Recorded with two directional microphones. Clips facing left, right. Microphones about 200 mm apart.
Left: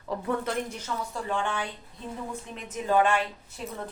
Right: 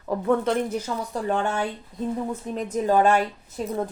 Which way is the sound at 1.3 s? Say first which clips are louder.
Right 5 dB; 45° right (ahead or behind).